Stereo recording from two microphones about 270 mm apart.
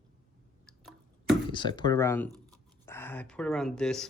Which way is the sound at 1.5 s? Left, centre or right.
Centre.